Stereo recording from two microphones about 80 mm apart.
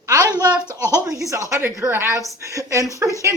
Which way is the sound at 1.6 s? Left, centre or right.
Right.